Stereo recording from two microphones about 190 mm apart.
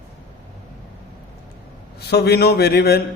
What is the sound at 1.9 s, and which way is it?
A man's voice, 60° left (ahead or behind).